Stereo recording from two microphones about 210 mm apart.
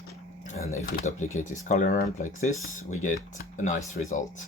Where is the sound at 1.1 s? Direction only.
35° left (ahead or behind).